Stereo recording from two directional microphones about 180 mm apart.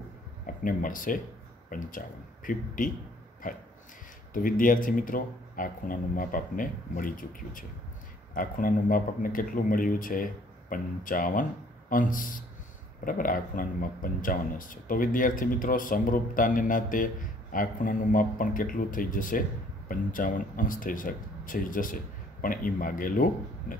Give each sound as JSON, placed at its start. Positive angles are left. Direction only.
{"t": 0.5, "sound": "speech", "side_deg": 50}